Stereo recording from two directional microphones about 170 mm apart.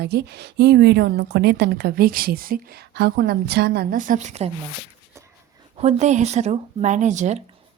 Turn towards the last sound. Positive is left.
turn(degrees=-45)  # may be behind; listen again after turning